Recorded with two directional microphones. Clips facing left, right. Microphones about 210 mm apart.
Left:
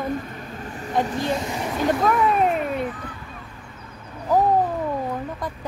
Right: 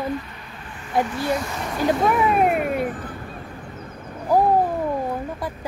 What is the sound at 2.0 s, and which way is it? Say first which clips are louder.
Speech: right 1 dB; 10° right (ahead or behind).